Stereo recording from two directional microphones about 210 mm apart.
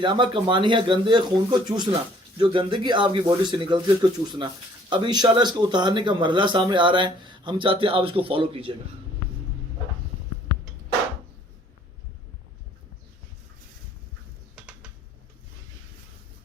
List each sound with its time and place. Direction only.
0.0 s speech: 25° right (ahead or behind)
4.9 s speech: 20° right (ahead or behind)